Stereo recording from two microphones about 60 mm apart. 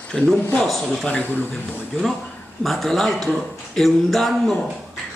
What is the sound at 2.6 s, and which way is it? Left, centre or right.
A man's voice, centre.